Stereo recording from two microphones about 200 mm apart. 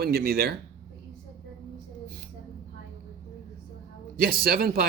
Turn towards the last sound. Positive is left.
turn(degrees=-45)  # may be behind; listen again after turning